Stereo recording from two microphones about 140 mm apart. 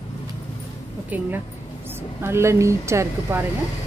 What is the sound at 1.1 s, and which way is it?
Speech, 10° right (ahead or behind).